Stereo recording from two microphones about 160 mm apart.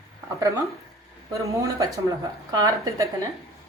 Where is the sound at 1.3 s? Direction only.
20° right (ahead or behind).